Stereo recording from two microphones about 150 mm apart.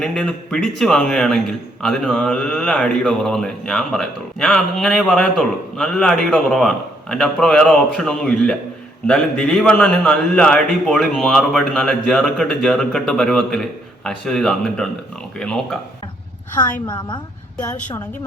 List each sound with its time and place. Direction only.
0.0 s speech: 5° left (ahead or behind)
16.8 s a woman's voice: 30° left (ahead or behind)